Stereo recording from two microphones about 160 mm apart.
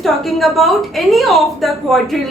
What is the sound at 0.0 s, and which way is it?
A woman's voice, centre (ahead or behind).